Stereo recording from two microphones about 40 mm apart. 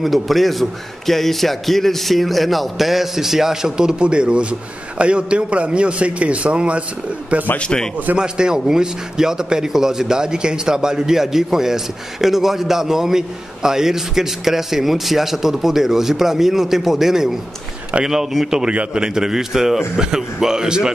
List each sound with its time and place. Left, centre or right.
0.0 s a man's voice: centre; by 6.8 s right
7.5 s a man's voice: left
8.2 s a man's voice: centre